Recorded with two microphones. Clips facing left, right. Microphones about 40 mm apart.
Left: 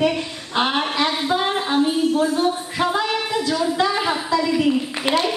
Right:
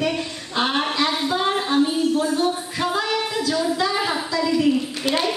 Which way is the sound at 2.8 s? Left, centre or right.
Centre.